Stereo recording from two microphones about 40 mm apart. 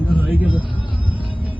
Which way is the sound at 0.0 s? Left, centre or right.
Left.